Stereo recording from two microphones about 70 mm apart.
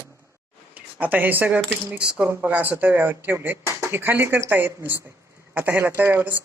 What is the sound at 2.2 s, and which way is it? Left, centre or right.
Speech, right.